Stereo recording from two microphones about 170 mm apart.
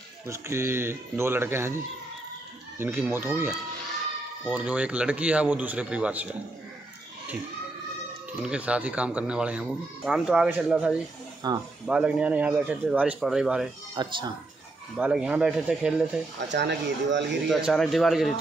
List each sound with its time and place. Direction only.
0.3 s speech: 15° right (ahead or behind)
2.8 s speech: 15° right (ahead or behind)
8.3 s speech: 5° right (ahead or behind)
11.4 s speech: 25° right (ahead or behind)
11.8 s speech: 5° right (ahead or behind)
14.0 s speech: 25° right (ahead or behind)
15.0 s speech: 5° right (ahead or behind)
16.3 s speech: 90° right
17.5 s speech: centre (ahead or behind)